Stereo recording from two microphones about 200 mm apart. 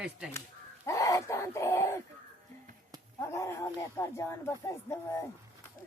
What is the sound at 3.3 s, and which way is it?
Speech, 15° left (ahead or behind).